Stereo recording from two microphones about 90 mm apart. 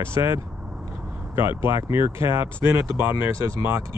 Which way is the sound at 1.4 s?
30° right (ahead or behind).